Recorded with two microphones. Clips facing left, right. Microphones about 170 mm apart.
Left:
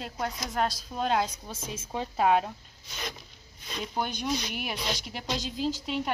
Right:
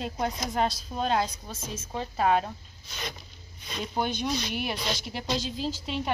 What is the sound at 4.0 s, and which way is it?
A woman's voice, 10° left (ahead or behind).